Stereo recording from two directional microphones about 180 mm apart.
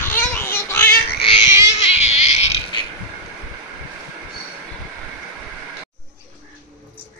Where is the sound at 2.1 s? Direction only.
35° left (ahead or behind).